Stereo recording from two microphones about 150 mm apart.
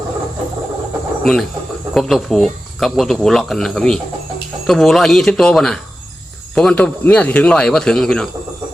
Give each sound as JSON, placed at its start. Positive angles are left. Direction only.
{"t": 1.2, "sound": "speech", "side_deg": 5}